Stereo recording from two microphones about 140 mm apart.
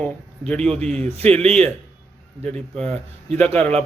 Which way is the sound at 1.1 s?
45° right (ahead or behind).